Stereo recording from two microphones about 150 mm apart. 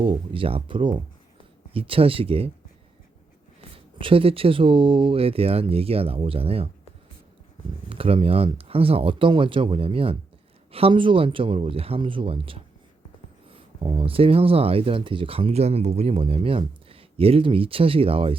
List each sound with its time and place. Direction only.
0.0 s speech: 35° right (ahead or behind)
3.9 s speech: 35° right (ahead or behind)
7.9 s speech: 40° right (ahead or behind)